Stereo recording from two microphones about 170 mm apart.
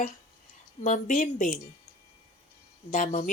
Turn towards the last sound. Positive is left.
turn(degrees=50)  # may be behind; listen again after turning